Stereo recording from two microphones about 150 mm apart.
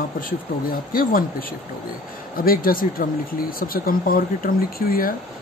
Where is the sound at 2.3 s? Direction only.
75° left (ahead or behind).